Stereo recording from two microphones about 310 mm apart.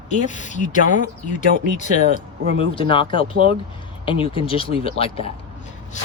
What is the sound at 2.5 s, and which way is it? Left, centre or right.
Speech, centre.